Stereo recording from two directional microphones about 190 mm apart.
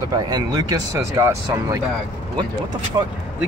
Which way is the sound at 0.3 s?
20° right (ahead or behind).